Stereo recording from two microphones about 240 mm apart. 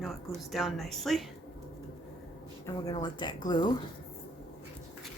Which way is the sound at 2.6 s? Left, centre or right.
Centre.